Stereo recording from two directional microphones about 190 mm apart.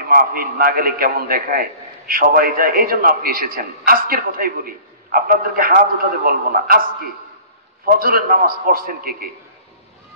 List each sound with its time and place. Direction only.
0.1 s a man's voice: 50° right (ahead or behind)